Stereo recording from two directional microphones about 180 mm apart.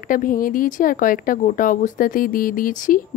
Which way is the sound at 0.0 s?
50° left (ahead or behind).